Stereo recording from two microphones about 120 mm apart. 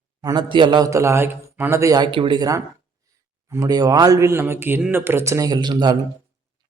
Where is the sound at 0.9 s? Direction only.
25° right (ahead or behind).